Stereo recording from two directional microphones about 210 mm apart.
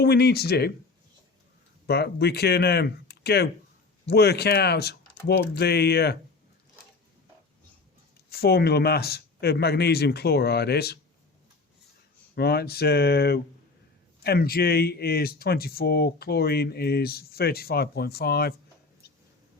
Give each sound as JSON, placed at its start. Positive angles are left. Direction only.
{"t": 0.0, "sound": "speech", "side_deg": 50}
{"t": 1.9, "sound": "speech", "side_deg": 50}
{"t": 8.3, "sound": "speech", "side_deg": 50}
{"t": 12.3, "sound": "speech", "side_deg": 50}
{"t": 19.0, "sound": "a sound", "side_deg": 50}